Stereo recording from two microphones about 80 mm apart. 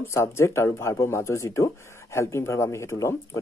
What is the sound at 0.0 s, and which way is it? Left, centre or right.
Speech, left.